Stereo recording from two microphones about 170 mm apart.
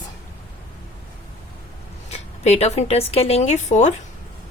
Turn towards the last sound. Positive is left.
turn(degrees=45)  # may be behind; listen again after turning